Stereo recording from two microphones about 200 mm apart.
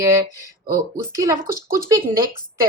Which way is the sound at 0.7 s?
15° right (ahead or behind).